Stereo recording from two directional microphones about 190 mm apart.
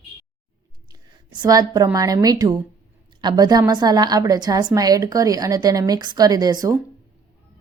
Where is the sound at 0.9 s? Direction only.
20° right (ahead or behind).